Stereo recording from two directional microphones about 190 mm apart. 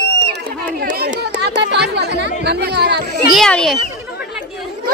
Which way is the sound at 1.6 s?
60° right (ahead or behind).